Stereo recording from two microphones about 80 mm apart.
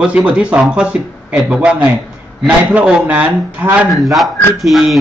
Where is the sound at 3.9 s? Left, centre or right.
Centre.